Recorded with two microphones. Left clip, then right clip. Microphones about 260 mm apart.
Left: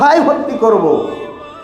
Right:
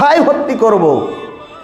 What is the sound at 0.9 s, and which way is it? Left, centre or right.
Speech, centre.